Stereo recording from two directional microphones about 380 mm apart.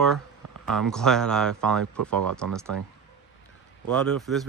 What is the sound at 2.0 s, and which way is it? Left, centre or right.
Speech, right.